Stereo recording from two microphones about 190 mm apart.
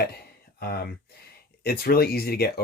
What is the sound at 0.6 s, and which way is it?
Speech, 55° left (ahead or behind).